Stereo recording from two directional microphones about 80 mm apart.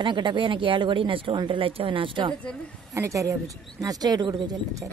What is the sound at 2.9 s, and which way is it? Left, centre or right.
Speech, right.